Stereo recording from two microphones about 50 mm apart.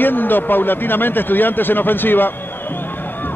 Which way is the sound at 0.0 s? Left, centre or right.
Left.